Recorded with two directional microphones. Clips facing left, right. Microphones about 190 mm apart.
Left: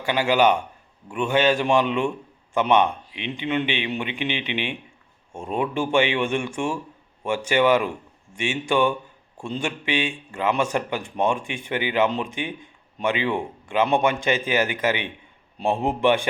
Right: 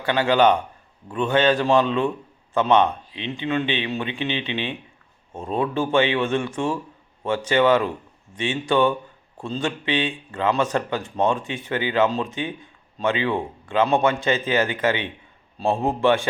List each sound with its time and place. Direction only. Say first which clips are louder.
0.0 s a man's voice: right 1 dB; 15° left (ahead or behind)